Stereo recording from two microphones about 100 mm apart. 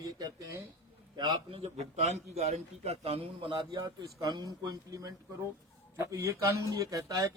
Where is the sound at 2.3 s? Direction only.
90° right.